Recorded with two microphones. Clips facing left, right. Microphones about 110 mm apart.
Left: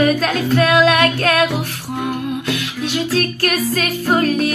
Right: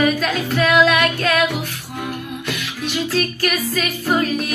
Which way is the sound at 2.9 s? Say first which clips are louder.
Left 2 dB; 50° left (ahead or behind).